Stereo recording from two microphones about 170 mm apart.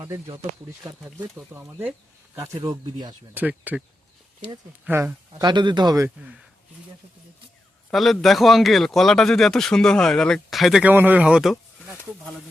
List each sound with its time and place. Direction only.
0.9 s speech: 10° right (ahead or behind)
3.3 s speech: 10° right (ahead or behind)
4.9 s speech: 10° right (ahead or behind)
5.4 s speech: 25° right (ahead or behind)
7.9 s speech: centre (ahead or behind)